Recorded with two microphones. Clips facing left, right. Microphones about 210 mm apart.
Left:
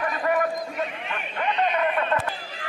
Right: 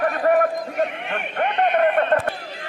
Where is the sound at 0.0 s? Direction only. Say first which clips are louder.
Right 6 dB; 60° right (ahead or behind).